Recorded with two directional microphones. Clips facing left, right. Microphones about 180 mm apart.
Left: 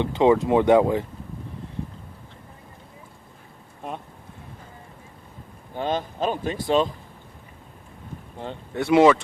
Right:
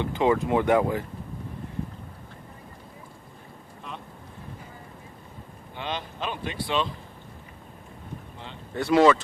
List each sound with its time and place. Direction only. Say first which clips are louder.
0.0 s speech: left 5 dB; 20° left (ahead or behind)
5.7 s speech: left 7 dB; 45° left (ahead or behind)
8.7 s speech: left 3 dB; 15° left (ahead or behind)